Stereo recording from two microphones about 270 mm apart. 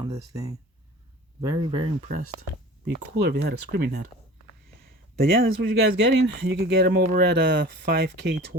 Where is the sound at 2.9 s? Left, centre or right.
Right.